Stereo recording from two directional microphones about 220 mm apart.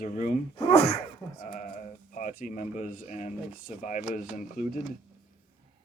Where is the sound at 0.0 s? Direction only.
35° left (ahead or behind).